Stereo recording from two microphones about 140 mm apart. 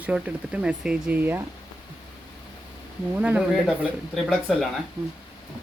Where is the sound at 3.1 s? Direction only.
10° right (ahead or behind).